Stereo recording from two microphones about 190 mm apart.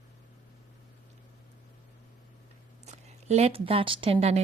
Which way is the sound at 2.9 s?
35° right (ahead or behind).